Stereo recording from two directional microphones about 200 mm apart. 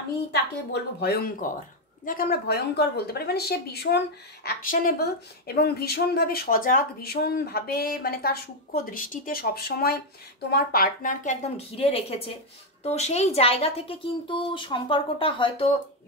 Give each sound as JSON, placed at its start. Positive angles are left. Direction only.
{"t": 0.3, "sound": "a woman's voice", "side_deg": 55}